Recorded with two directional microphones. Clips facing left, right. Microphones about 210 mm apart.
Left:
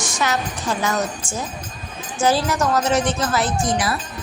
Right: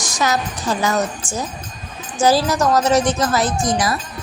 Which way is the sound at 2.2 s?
40° right (ahead or behind).